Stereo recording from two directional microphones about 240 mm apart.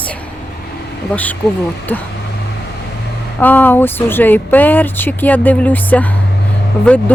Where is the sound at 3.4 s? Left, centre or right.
Centre.